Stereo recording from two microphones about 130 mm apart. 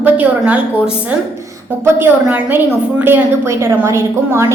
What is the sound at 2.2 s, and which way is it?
A woman's voice, 15° right (ahead or behind).